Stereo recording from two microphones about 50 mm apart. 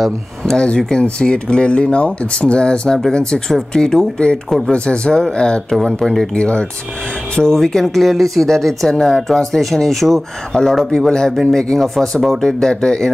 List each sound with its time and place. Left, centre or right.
0.6 s speech: centre
4.5 s speech: centre
4.7 s speech: centre
5.7 s speech: centre
6.3 s speech: left